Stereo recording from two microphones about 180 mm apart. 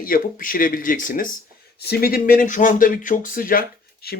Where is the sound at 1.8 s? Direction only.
60° left (ahead or behind).